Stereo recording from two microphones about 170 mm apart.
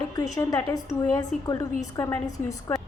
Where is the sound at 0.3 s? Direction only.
20° left (ahead or behind).